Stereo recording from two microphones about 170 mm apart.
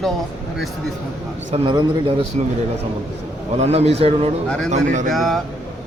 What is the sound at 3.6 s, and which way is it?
Speech, 40° right (ahead or behind).